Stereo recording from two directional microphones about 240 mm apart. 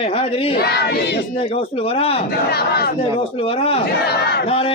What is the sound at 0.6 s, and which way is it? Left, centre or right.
Crowd, left.